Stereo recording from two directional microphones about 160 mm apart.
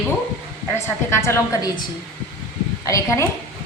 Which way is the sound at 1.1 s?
15° left (ahead or behind).